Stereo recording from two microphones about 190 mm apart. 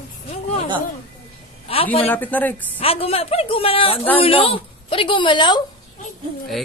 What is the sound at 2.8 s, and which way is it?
A woman's voice, 30° left (ahead or behind).